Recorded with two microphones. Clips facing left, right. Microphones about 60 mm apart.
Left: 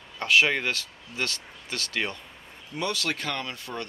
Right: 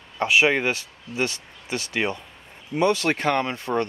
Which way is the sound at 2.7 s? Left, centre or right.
Right.